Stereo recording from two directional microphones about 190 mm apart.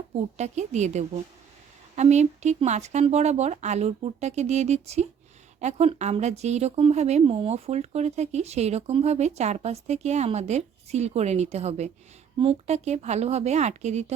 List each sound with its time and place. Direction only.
0.3 s speech: 35° right (ahead or behind)